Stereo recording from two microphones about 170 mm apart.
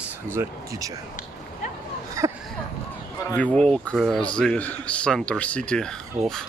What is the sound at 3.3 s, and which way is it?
Speech, 5° left (ahead or behind).